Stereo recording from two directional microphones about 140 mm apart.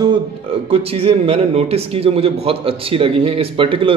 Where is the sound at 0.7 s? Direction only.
45° right (ahead or behind).